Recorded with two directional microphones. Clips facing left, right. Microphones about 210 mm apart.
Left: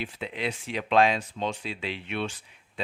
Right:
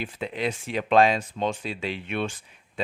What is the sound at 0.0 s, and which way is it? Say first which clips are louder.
Speech: right 3 dB; 45° right (ahead or behind).